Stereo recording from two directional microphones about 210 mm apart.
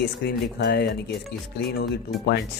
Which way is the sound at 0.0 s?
50° left (ahead or behind).